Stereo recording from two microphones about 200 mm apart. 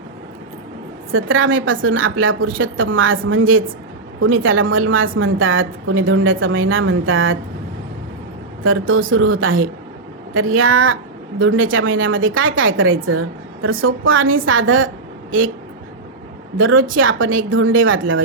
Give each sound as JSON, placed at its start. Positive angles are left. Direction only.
{"t": 1.1, "sound": "a woman's voice", "side_deg": -85}
{"t": 8.6, "sound": "a woman's voice", "side_deg": -90}
{"t": 10.3, "sound": "a woman's voice", "side_deg": -90}
{"t": 16.6, "sound": "a woman's voice", "side_deg": -85}